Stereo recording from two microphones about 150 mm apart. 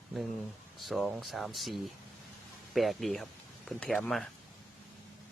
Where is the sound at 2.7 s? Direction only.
Centre (ahead or behind).